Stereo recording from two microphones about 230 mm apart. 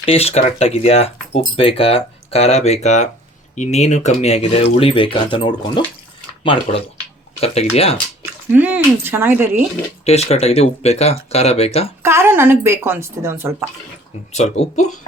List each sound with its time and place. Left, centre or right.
0.0 s speech: left
8.2 s speech: centre
10.0 s speech: left
12.0 s speech: centre
14.3 s speech: left